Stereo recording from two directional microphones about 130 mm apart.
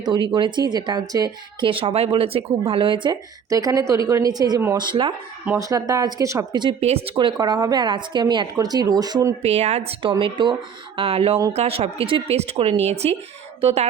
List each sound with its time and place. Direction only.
0.3 s a woman's voice: 35° right (ahead or behind)
1.7 s speech: 45° right (ahead or behind)
3.5 s a woman's voice: 25° right (ahead or behind)
5.5 s speech: 25° right (ahead or behind)
6.7 s speech: 55° right (ahead or behind)
7.2 s a woman's voice: 35° right (ahead or behind)
9.4 s speech: 55° right (ahead or behind)
10.0 s a woman's voice: 45° right (ahead or behind)